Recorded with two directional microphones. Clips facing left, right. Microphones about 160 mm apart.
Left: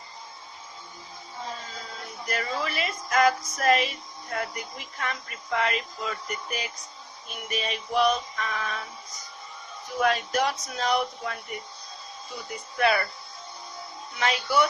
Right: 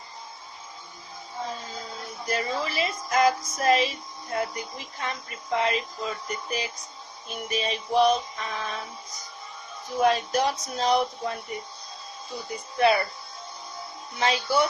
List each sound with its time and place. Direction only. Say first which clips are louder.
2.2 s speech: right 2 dB; 30° right (ahead or behind)
10.0 s speech: right 2 dB; 30° right (ahead or behind)
12.7 s speech: right 3 dB; 25° right (ahead or behind)
14.2 s speech: right 1 dB; 30° right (ahead or behind)